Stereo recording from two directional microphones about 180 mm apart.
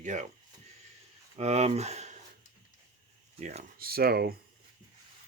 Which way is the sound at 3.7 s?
55° right (ahead or behind).